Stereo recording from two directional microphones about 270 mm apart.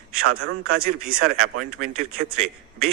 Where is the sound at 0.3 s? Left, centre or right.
Right.